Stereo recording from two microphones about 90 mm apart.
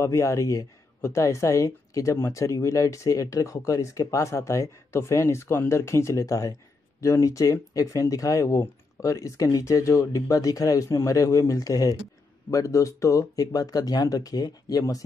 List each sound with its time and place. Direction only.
0.0 s speech: 35° left (ahead or behind)